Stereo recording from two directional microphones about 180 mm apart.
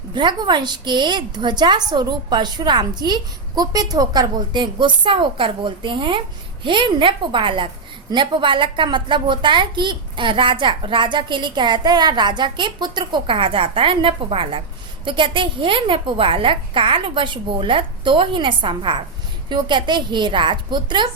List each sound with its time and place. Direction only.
0.1 s a woman's voice: 25° right (ahead or behind)